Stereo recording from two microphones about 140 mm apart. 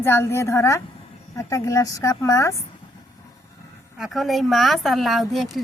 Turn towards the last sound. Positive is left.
turn(degrees=0)  # may be behind; listen again after turning